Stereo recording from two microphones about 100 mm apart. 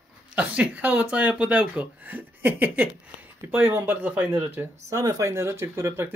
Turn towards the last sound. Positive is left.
turn(degrees=-30)  # may be behind; listen again after turning